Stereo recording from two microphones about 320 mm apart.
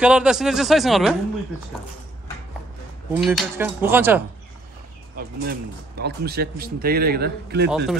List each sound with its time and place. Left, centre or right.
0.0 s speech: centre
3.1 s speech: centre
5.1 s speech: right
7.7 s speech: centre